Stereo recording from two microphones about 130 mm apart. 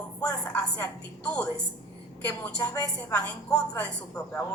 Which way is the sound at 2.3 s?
15° left (ahead or behind).